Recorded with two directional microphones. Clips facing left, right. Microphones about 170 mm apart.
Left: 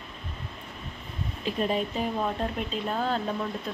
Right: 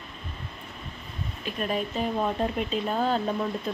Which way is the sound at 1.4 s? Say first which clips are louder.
Left 2 dB; 25° left (ahead or behind).